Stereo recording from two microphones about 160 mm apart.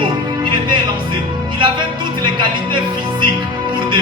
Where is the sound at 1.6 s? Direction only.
30° right (ahead or behind).